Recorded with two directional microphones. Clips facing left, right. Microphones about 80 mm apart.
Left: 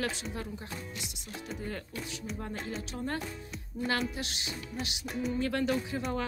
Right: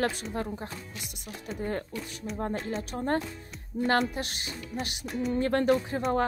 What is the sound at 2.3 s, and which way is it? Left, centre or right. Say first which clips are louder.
Music: right 8 dB; right.